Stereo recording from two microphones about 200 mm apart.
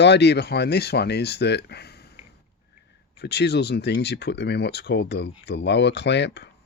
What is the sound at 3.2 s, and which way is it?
Speech, 55° left (ahead or behind).